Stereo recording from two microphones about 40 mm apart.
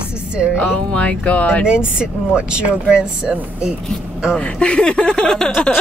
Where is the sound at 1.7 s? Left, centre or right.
Right.